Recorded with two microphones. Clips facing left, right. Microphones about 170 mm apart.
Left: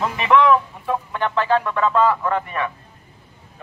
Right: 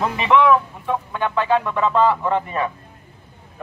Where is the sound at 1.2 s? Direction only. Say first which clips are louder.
Even; 10° right (ahead or behind).